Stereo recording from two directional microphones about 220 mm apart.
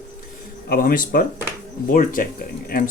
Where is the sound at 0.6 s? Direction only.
40° left (ahead or behind).